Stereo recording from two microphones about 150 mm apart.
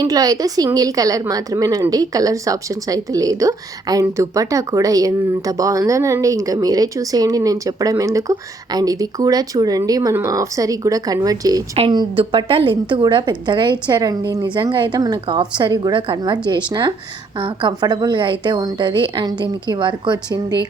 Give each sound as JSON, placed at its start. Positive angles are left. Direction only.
{"t": 0.0, "sound": "a woman's voice", "side_deg": -25}